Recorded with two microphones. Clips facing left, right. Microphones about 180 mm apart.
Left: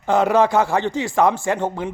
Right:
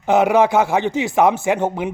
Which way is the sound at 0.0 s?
15° right (ahead or behind).